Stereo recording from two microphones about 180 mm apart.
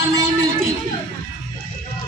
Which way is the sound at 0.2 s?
15° right (ahead or behind).